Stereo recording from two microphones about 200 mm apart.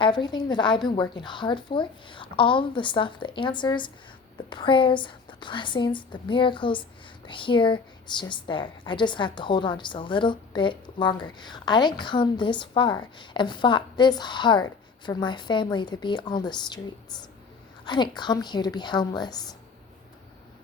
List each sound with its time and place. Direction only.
0.0 s a woman's voice: 20° left (ahead or behind)
17.8 s a woman's voice: 20° left (ahead or behind)